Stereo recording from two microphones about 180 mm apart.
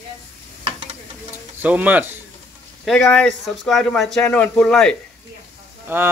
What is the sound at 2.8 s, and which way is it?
Speech, centre (ahead or behind).